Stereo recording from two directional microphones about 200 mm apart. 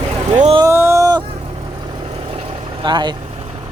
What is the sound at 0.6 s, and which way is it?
Speech, 15° right (ahead or behind).